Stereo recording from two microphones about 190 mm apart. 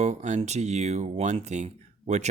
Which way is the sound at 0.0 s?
35° right (ahead or behind).